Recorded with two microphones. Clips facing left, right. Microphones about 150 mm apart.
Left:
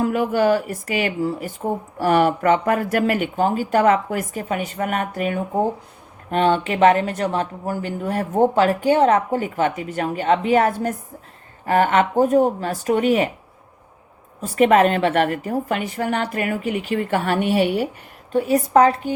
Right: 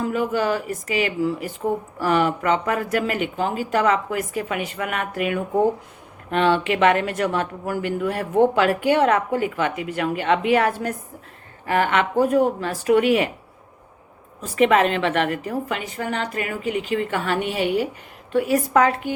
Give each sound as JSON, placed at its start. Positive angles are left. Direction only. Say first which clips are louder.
{"t": 0.0, "sound": "speech", "louder": "left 4 dB", "side_deg": 55}
{"t": 14.4, "sound": "speech", "louder": "left 3 dB", "side_deg": 45}